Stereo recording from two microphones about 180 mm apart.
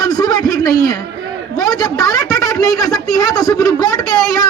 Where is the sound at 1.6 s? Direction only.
20° left (ahead or behind).